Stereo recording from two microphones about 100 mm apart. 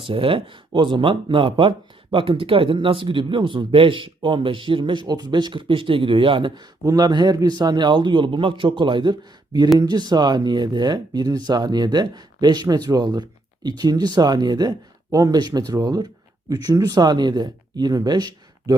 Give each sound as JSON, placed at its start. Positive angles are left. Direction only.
{"t": 0.0, "sound": "speech", "side_deg": -65}
{"t": 6.8, "sound": "speech", "side_deg": -40}